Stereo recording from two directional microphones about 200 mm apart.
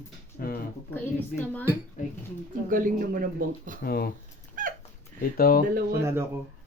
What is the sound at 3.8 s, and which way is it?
Speech, 50° left (ahead or behind).